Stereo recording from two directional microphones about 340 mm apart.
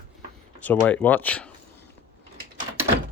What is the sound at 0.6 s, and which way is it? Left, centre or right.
Speech, centre.